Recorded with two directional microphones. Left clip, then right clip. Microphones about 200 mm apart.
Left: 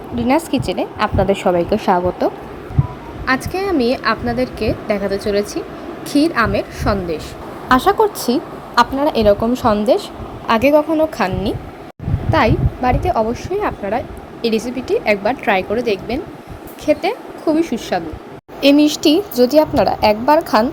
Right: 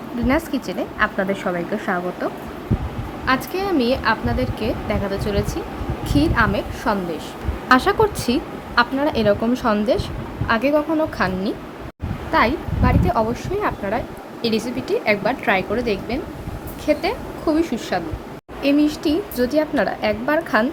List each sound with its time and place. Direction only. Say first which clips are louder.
0.6 s a woman's voice: left 6 dB; 20° right (ahead or behind)
0.9 s a woman's voice: left 3 dB; 10° left (ahead or behind)
3.2 s a woman's voice: left 3 dB; 15° left (ahead or behind)
7.7 s a woman's voice: left 3 dB; centre (ahead or behind)